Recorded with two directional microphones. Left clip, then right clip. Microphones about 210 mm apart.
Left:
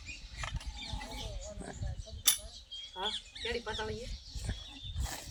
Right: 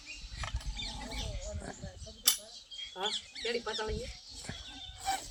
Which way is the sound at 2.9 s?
50° right (ahead or behind).